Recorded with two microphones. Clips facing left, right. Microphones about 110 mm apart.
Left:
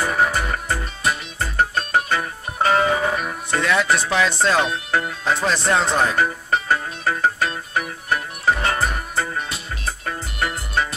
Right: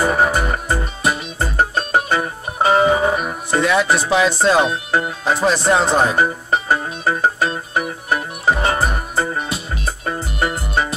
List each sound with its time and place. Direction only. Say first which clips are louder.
0.0 s music: right 4 dB; 25° right (ahead or behind)